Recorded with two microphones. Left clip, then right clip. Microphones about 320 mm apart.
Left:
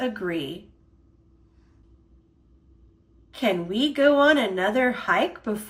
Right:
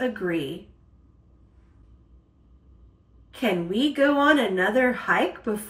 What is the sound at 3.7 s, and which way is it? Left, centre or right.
Speech, centre.